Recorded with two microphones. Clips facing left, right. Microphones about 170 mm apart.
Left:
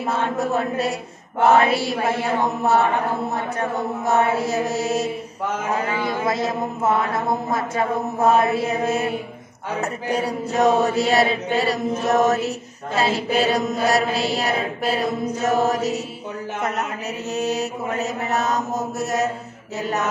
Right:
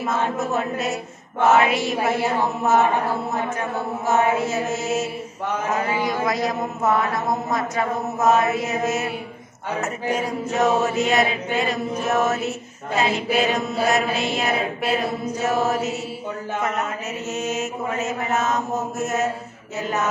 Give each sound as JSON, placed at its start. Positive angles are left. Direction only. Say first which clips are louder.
{"t": 0.0, "sound": "chant", "louder": "left 1 dB", "side_deg": 35}
{"t": 4.1, "sound": "chant", "louder": "even", "side_deg": 35}
{"t": 6.0, "sound": "a man's voice", "louder": "even", "side_deg": 25}
{"t": 7.5, "sound": "chant", "louder": "left 1 dB", "side_deg": 30}
{"t": 17.3, "sound": "chant", "louder": "left 3 dB", "side_deg": 35}